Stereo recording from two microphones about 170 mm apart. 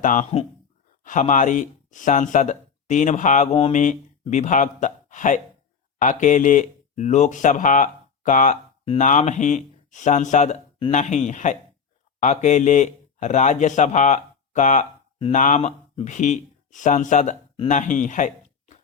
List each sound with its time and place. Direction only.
0.0 s speech: 45° left (ahead or behind)